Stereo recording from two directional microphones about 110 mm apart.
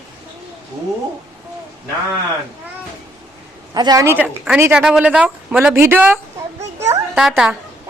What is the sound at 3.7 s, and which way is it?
Speech, 40° right (ahead or behind).